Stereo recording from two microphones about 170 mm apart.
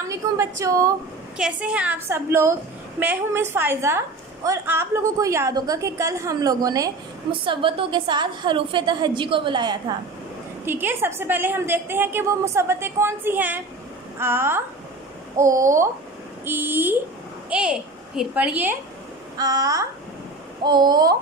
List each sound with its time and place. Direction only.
0.1 s a woman's voice: 20° right (ahead or behind)
1.4 s a woman's voice: 5° right (ahead or behind); by 9.9 s 25° right (ahead or behind)
10.6 s a woman's voice: 10° right (ahead or behind)
19.3 s a woman's voice: 20° right (ahead or behind)